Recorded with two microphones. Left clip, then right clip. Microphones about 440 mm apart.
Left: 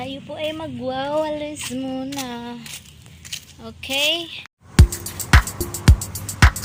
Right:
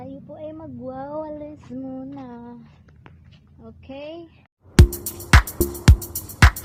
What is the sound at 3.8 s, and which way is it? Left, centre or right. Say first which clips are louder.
Speech: left 16 dB; right.